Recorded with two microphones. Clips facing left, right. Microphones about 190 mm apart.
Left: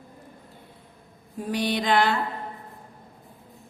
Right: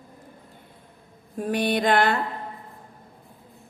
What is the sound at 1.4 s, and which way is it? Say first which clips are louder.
Speech: right 3 dB; 55° right (ahead or behind).